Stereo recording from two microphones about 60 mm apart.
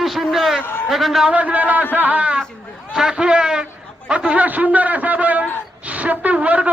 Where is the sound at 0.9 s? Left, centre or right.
Centre.